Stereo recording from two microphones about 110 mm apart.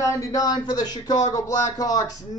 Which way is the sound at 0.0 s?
30° left (ahead or behind).